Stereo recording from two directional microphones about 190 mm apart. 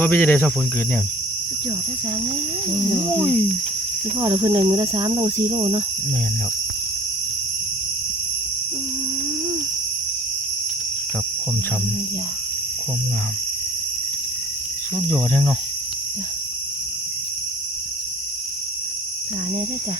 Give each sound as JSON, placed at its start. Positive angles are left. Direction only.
{"t": 0.0, "sound": "speech", "side_deg": 10}
{"t": 3.2, "sound": "speech", "side_deg": 5}
{"t": 4.2, "sound": "speech", "side_deg": -20}
{"t": 15.1, "sound": "speech", "side_deg": 5}